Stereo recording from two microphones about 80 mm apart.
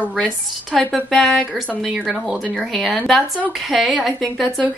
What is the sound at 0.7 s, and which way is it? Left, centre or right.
Speech, centre.